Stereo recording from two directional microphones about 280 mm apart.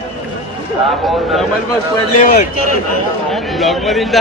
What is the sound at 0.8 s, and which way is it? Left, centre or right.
Speech, centre.